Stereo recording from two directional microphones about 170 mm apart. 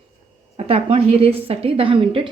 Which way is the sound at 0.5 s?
35° right (ahead or behind).